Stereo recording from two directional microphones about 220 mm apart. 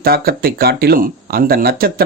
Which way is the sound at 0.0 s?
45° right (ahead or behind).